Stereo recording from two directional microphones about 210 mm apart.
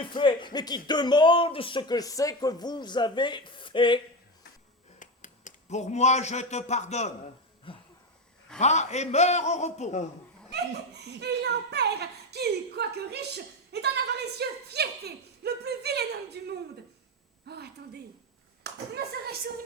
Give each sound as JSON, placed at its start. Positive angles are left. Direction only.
{"t": 0.0, "sound": "speech", "side_deg": 20}
{"t": 4.9, "sound": "speech", "side_deg": 35}
{"t": 7.7, "sound": "a sound", "side_deg": 25}
{"t": 8.5, "sound": "a man's voice", "side_deg": 35}
{"t": 10.5, "sound": "a child's voice", "side_deg": -55}